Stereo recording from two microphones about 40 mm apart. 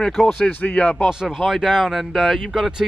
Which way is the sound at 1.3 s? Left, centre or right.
Centre.